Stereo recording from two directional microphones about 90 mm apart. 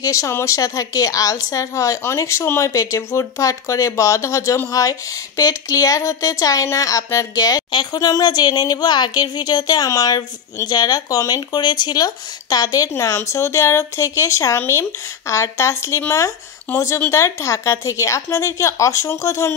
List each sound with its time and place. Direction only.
0.0 s a woman's voice: 35° left (ahead or behind)